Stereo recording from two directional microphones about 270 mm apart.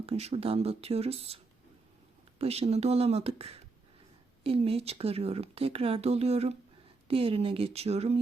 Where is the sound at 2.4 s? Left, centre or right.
Right.